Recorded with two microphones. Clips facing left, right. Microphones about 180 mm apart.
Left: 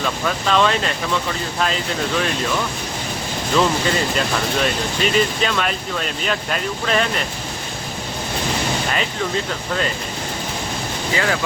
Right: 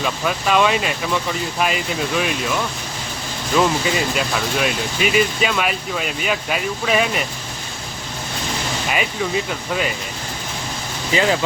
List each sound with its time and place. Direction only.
0.0 s speech: 10° right (ahead or behind)
3.8 s speech: 5° right (ahead or behind)
8.9 s speech: 10° right (ahead or behind)
11.1 s speech: 20° right (ahead or behind)